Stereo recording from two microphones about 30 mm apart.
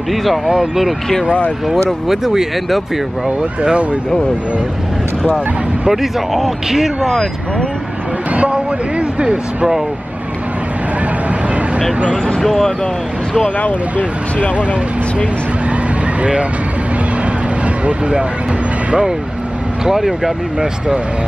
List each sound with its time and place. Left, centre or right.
0.1 s speech: centre
2.0 s speech: centre
5.9 s speech: centre
9.2 s speech: right
12.4 s speech: centre
19.8 s speech: centre